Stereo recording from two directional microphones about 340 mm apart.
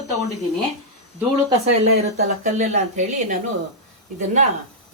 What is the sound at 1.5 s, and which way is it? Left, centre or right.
Speech, centre.